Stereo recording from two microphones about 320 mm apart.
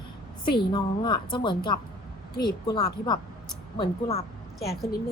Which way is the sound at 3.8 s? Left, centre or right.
Left.